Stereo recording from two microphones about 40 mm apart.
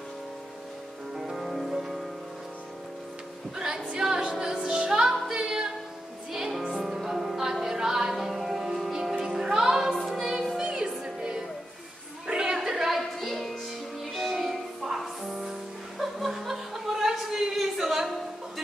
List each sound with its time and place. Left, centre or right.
1.1 s music: centre
3.5 s music: centre
10.6 s music: centre
12.3 s a sound: centre
13.3 s music: centre
14.4 s music: centre
16.0 s chuckle: centre